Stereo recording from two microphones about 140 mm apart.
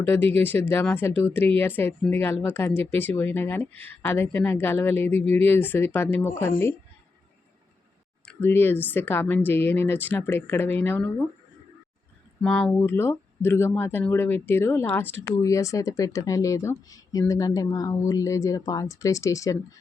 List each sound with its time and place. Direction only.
0.0 s speech: 15° left (ahead or behind)
8.2 s speech: 15° left (ahead or behind)
12.4 s speech: 5° left (ahead or behind)
12.7 s speech: 15° left (ahead or behind)